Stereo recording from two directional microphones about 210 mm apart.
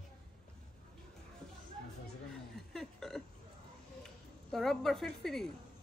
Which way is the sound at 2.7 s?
Centre (ahead or behind).